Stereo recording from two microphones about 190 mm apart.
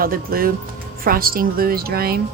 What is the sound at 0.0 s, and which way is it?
Speech, 50° right (ahead or behind).